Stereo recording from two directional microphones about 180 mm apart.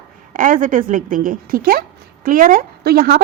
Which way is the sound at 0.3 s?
50° right (ahead or behind).